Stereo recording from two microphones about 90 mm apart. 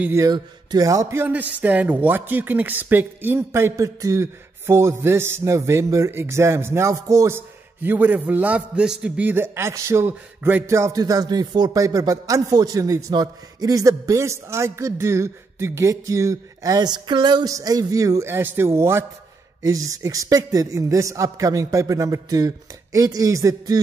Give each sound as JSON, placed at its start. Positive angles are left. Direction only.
{"t": 0.3, "sound": "speech", "side_deg": -50}
{"t": 1.1, "sound": "a man's voice", "side_deg": -20}
{"t": 7.3, "sound": "a man's voice", "side_deg": -20}
{"t": 9.3, "sound": "a man's voice", "side_deg": -30}
{"t": 17.5, "sound": "a man's voice", "side_deg": -40}
{"t": 19.6, "sound": "a man's voice", "side_deg": -40}